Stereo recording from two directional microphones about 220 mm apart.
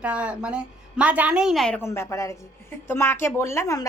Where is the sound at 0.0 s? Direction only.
5° right (ahead or behind).